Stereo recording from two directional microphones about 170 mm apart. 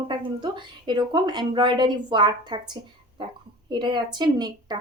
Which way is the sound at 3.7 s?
25° right (ahead or behind).